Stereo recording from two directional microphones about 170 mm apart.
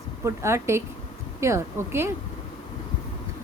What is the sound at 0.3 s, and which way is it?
A woman's voice, 15° right (ahead or behind).